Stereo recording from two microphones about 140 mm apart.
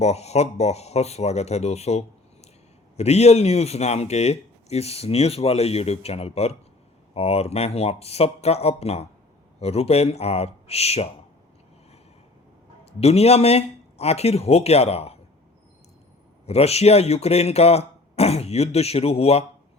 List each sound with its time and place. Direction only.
0.0 s a man's voice: 50° left (ahead or behind)
13.0 s a man's voice: 45° left (ahead or behind)
16.5 s a man's voice: 50° left (ahead or behind)